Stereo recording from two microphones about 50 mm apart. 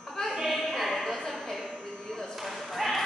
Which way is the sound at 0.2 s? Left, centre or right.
Centre.